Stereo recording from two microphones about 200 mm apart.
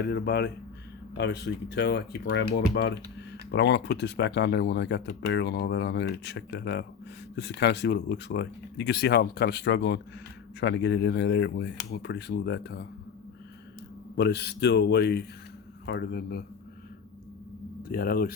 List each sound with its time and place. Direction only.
0.0 s speech: 55° left (ahead or behind)
14.2 s speech: 55° left (ahead or behind)
17.8 s speech: 50° left (ahead or behind)